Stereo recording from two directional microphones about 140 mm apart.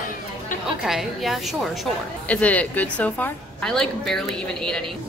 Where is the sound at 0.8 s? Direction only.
Centre (ahead or behind).